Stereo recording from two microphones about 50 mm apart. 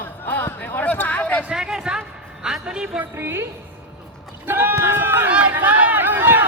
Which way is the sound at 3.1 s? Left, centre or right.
Right.